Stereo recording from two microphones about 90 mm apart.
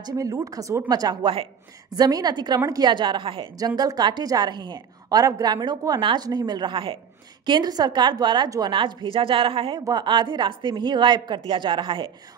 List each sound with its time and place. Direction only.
0.0 s a woman's voice: 45° right (ahead or behind)
1.2 s a woman's voice: 90° right
1.9 s a woman's voice: 45° right (ahead or behind)
2.9 s a woman's voice: 60° right (ahead or behind)
3.5 s a woman's voice: 45° right (ahead or behind); by 7.0 s 70° right (ahead or behind)
7.4 s a woman's voice: 55° right (ahead or behind); by 9.8 s 85° right
9.8 s a woman's voice: 50° right (ahead or behind); by 12.1 s 65° right (ahead or behind)